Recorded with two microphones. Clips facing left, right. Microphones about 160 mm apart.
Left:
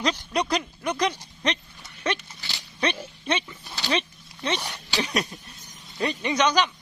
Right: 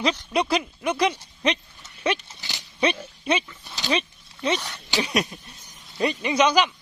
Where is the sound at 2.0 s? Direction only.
20° right (ahead or behind).